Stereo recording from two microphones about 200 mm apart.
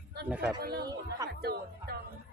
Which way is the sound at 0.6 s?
55° right (ahead or behind).